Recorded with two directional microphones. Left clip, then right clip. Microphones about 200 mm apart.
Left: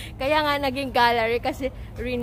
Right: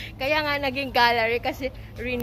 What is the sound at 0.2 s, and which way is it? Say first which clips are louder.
A woman's voice: left 2 dB; 15° left (ahead or behind).